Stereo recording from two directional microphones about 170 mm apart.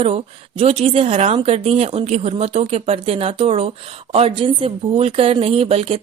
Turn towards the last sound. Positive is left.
turn(degrees=-35)  # may be behind; listen again after turning